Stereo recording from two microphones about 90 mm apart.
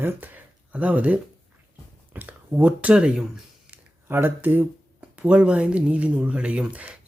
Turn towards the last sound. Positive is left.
turn(degrees=-15)  # may be behind; listen again after turning